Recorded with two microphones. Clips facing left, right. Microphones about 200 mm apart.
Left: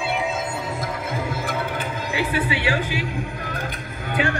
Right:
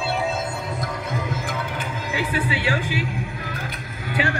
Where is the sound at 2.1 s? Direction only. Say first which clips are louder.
Left 1 dB; 45° right (ahead or behind).